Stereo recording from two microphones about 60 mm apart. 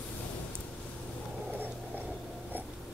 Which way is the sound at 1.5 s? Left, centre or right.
Right.